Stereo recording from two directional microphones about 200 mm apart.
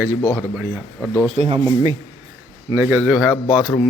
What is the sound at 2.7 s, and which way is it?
Speech, 15° right (ahead or behind).